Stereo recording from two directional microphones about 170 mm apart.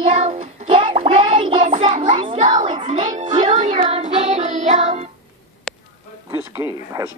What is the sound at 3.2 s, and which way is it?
Music, 25° right (ahead or behind).